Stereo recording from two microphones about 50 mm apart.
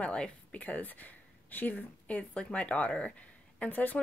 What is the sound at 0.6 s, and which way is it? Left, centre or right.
A woman's voice, left.